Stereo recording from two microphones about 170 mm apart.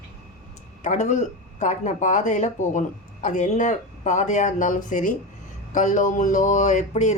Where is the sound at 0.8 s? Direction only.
45° left (ahead or behind).